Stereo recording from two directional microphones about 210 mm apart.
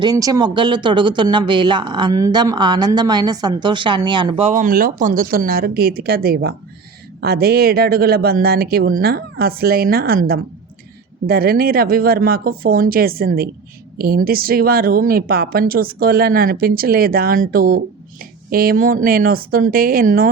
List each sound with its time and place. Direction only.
0.0 s a woman's voice: 20° right (ahead or behind); by 20.2 s 45° right (ahead or behind)